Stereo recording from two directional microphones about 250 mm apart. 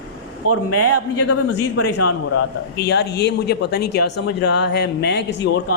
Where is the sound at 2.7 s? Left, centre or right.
Left.